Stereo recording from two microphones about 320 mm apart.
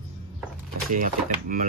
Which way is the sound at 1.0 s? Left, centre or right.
Right.